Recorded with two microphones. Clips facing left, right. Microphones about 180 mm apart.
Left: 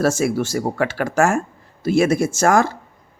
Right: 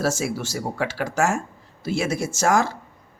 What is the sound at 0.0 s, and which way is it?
Speech, 55° left (ahead or behind).